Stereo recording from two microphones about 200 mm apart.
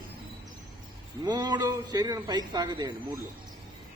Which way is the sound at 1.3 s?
20° right (ahead or behind).